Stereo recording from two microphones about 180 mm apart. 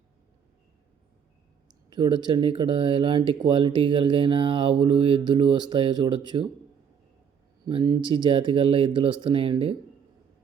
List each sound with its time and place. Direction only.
1.6 s speech: 25° right (ahead or behind)
7.6 s speech: 25° right (ahead or behind)